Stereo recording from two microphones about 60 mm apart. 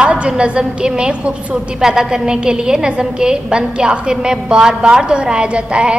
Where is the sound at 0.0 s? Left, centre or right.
Centre.